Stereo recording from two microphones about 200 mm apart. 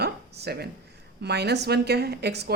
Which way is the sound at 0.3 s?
55° right (ahead or behind).